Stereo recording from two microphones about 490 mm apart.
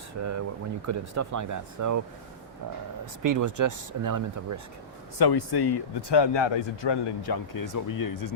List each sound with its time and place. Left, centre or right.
0.2 s speech: right
3.2 s speech: right
5.2 s speech: left